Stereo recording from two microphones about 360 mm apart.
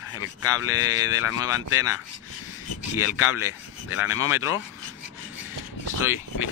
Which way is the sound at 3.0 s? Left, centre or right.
Left.